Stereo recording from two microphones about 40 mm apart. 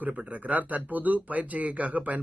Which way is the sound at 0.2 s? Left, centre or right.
Right.